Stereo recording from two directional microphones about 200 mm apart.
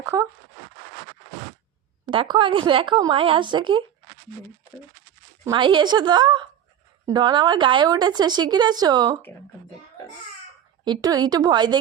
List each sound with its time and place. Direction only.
0.0 s a sound: 15° right (ahead or behind)
2.0 s a woman's voice: 25° right (ahead or behind)
5.5 s a woman's voice: 25° right (ahead or behind)
10.8 s a woman's voice: 20° right (ahead or behind)